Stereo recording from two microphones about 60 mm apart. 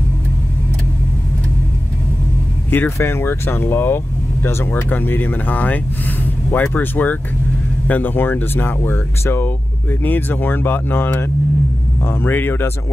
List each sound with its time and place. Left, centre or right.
2.7 s speech: left